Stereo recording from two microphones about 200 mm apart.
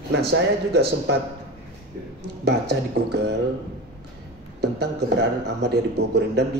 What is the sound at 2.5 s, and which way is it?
Speech, 55° right (ahead or behind).